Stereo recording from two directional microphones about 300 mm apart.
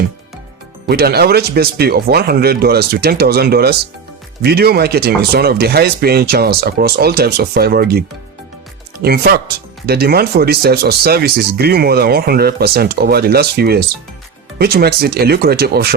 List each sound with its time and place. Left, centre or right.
0.9 s speech: right